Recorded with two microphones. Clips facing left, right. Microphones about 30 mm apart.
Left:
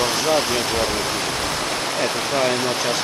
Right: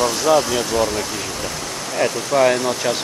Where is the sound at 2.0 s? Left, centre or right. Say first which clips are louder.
Right 6 dB; centre.